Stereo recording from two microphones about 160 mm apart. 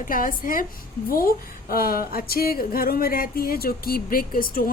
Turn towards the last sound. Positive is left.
turn(degrees=65)  # may be behind; listen again after turning